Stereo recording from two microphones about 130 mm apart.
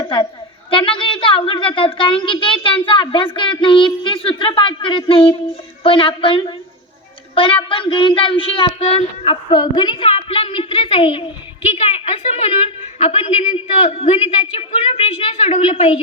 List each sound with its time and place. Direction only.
0.7 s a child's voice: 40° left (ahead or behind)